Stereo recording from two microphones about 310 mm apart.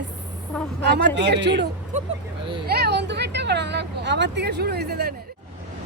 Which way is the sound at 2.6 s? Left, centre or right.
Right.